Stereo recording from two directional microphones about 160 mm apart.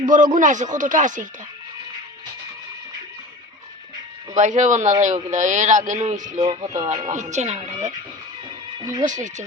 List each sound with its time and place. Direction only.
0.0 s a man's voice: 55° right (ahead or behind)
4.4 s a man's voice: 50° right (ahead or behind)
6.4 s speech: 25° right (ahead or behind)
7.0 s a man's voice: 50° right (ahead or behind)
9.0 s a man's voice: 50° right (ahead or behind)